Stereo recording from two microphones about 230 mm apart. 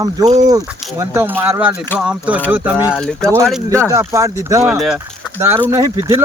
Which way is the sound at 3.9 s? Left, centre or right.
Centre.